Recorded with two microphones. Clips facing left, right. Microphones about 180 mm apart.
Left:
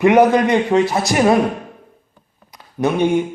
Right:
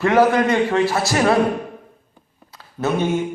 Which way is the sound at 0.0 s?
20° left (ahead or behind).